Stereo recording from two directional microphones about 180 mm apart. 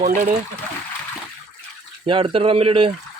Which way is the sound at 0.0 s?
50° right (ahead or behind).